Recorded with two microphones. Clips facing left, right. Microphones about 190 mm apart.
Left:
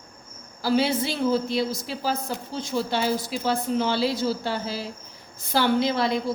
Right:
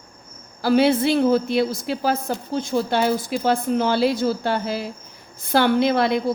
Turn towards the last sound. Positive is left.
turn(degrees=-60)  # may be behind; listen again after turning